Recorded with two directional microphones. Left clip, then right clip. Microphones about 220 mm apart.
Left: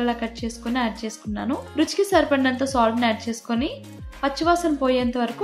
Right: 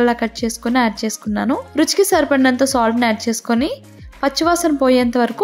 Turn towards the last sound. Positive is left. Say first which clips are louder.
# right 7 dB
turn(degrees=-45)  # may be behind; listen again after turning